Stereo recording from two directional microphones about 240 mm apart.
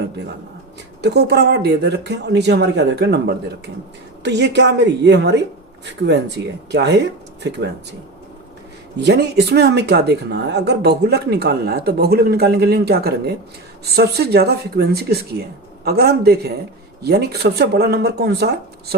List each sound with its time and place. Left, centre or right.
1.0 s speech: right
9.0 s speech: right